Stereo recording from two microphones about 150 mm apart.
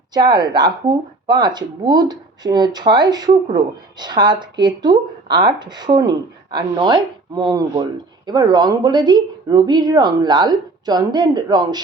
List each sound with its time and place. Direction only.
0.1 s speech: 30° right (ahead or behind)